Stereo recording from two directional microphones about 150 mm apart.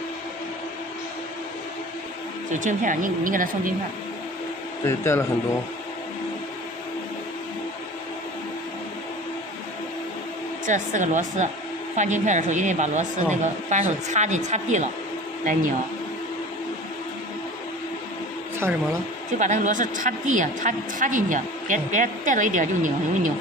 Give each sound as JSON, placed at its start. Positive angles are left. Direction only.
{"t": 2.5, "sound": "a woman's voice", "side_deg": -60}
{"t": 4.8, "sound": "speech", "side_deg": 15}
{"t": 10.6, "sound": "a woman's voice", "side_deg": -55}
{"t": 18.6, "sound": "speech", "side_deg": -15}
{"t": 19.3, "sound": "a woman's voice", "side_deg": -55}